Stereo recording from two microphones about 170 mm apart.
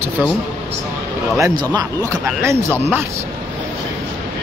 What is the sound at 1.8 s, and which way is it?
Speech, 15° right (ahead or behind).